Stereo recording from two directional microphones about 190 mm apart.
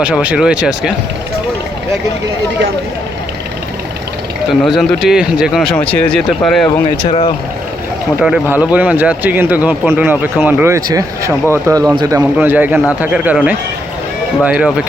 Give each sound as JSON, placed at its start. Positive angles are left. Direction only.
{"t": 0.0, "sound": "speech", "side_deg": -5}
{"t": 4.6, "sound": "speech", "side_deg": 0}
{"t": 7.1, "sound": "speech", "side_deg": 30}
{"t": 8.2, "sound": "speech", "side_deg": -5}